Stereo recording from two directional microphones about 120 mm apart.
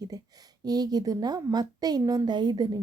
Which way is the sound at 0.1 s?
30° right (ahead or behind).